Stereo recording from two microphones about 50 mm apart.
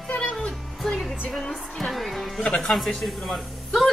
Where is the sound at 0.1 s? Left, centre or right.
Left.